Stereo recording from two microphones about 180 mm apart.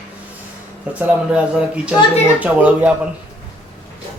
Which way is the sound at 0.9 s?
5° right (ahead or behind).